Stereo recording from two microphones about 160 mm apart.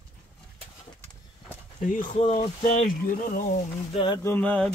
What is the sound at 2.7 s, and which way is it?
Speech, 55° left (ahead or behind).